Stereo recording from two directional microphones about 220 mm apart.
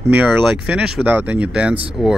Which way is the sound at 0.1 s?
5° right (ahead or behind).